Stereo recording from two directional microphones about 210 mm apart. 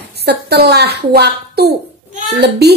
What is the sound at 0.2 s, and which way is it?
A woman's voice, 50° right (ahead or behind).